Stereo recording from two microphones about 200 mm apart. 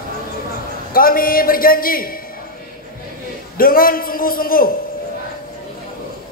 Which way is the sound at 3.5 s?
45° left (ahead or behind).